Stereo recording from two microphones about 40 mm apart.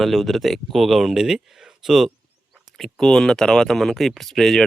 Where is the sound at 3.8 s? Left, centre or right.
Centre.